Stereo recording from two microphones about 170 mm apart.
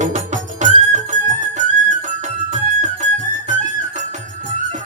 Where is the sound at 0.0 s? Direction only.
45° right (ahead or behind).